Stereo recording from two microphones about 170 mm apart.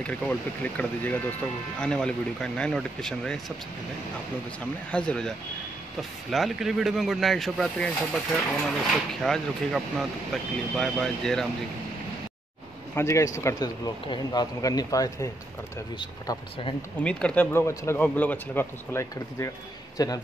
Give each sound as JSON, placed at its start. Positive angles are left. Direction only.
{"t": 0.0, "sound": "speech", "side_deg": 10}
{"t": 4.9, "sound": "speech", "side_deg": 5}
{"t": 12.9, "sound": "speech", "side_deg": 15}
{"t": 17.0, "sound": "speech", "side_deg": 5}